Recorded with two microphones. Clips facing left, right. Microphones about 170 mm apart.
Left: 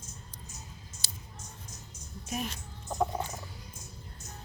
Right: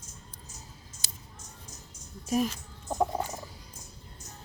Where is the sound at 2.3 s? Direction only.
40° right (ahead or behind).